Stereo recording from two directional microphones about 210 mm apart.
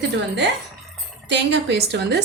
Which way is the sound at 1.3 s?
55° right (ahead or behind).